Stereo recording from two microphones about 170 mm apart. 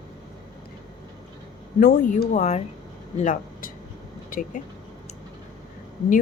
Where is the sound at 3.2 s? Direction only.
50° left (ahead or behind).